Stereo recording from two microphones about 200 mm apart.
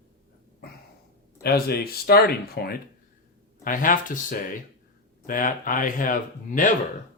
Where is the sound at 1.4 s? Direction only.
50° left (ahead or behind).